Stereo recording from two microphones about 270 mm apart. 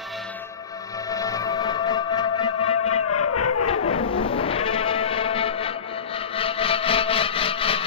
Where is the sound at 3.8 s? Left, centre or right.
Left.